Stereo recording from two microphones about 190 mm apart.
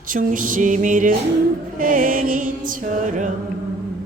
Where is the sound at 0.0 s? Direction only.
45° right (ahead or behind).